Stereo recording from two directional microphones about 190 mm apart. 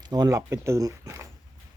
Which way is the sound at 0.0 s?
20° right (ahead or behind).